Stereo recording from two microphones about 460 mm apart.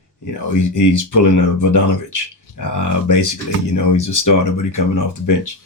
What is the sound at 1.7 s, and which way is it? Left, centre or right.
Speech, left.